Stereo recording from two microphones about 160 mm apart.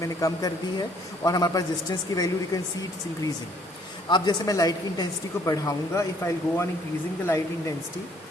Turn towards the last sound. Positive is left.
turn(degrees=15)  # may be behind; listen again after turning